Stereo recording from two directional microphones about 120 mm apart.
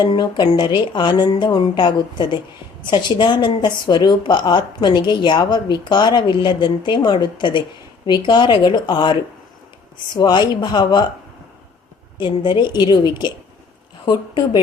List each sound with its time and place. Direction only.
0.0 s speech: 40° left (ahead or behind)
10.2 s speech: 40° left (ahead or behind)
12.1 s speech: 40° left (ahead or behind)